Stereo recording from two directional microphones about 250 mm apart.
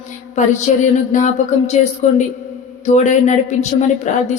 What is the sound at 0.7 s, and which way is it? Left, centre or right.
Speech, left.